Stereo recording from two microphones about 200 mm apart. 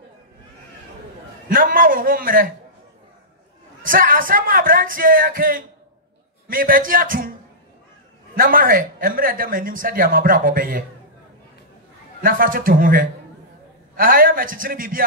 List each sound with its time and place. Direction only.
1.5 s speech: 45° right (ahead or behind)
3.8 s speech: 45° right (ahead or behind)
8.4 s speech: 45° right (ahead or behind)
12.2 s speech: 45° right (ahead or behind)